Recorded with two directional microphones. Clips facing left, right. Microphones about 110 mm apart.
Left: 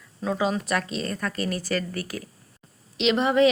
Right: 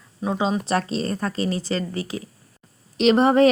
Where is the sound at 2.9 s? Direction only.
40° right (ahead or behind).